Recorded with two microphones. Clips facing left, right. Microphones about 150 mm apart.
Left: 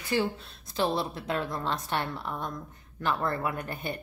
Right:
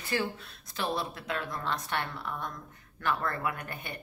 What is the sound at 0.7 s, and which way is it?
A woman's voice, 30° left (ahead or behind).